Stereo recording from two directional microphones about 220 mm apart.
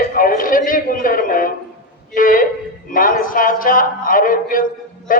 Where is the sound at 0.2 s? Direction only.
40° left (ahead or behind).